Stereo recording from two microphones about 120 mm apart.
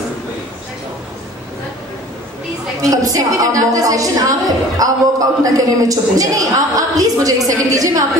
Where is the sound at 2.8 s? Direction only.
30° right (ahead or behind).